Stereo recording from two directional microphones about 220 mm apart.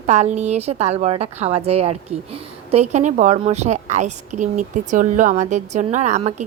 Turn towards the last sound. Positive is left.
turn(degrees=-30)  # may be behind; listen again after turning